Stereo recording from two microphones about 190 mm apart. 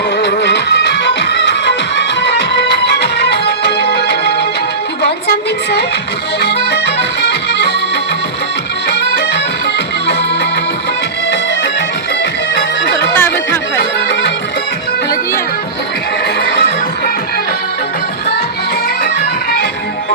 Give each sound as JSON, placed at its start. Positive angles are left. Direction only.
{"t": 0.2, "sound": "music", "side_deg": 65}
{"t": 6.4, "sound": "accordion", "side_deg": 60}
{"t": 8.9, "sound": "music", "side_deg": 60}
{"t": 13.1, "sound": "music", "side_deg": 10}